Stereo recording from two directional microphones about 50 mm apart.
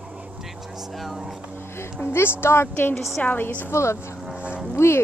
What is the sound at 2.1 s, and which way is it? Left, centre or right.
Speech, left.